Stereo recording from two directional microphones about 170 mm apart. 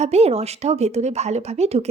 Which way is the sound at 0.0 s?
40° right (ahead or behind).